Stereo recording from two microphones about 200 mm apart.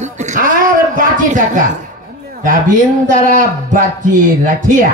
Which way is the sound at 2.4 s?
40° right (ahead or behind).